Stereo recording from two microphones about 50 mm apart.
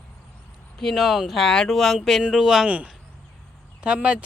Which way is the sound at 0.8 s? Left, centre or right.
Centre.